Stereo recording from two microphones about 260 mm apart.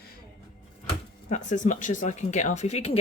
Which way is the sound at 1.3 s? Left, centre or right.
Left.